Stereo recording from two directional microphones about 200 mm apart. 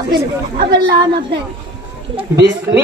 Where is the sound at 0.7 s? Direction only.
20° right (ahead or behind).